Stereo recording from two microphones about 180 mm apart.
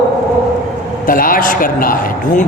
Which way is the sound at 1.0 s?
50° left (ahead or behind).